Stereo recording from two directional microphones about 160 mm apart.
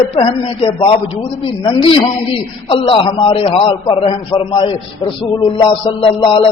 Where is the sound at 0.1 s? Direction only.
35° left (ahead or behind).